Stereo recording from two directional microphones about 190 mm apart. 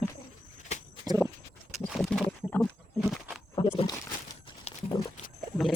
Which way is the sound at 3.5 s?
25° left (ahead or behind).